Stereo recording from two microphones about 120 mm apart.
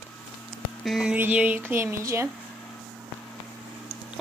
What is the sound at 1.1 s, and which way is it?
Speech, 15° right (ahead or behind).